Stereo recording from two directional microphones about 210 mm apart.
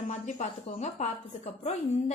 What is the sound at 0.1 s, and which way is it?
A woman's voice, 35° left (ahead or behind).